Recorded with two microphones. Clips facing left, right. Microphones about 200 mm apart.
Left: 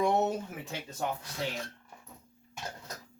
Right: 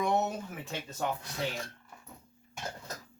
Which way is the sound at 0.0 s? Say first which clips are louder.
Left 2 dB; 30° left (ahead or behind).